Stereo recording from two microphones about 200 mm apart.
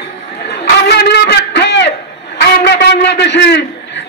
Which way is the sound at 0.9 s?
55° left (ahead or behind).